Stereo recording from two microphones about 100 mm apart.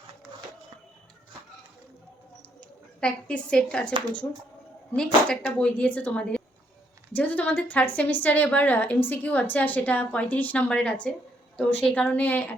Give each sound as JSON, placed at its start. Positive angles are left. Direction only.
{"t": 2.6, "sound": "speech", "side_deg": 10}
{"t": 4.9, "sound": "a woman's voice", "side_deg": 10}